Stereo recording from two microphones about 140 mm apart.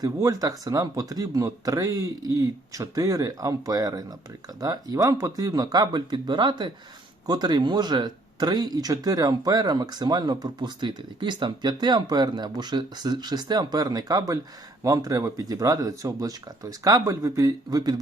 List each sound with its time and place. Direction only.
0.0 s speech: 25° right (ahead or behind)